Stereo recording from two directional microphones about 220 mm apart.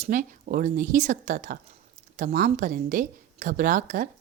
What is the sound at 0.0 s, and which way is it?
Speech, 35° right (ahead or behind).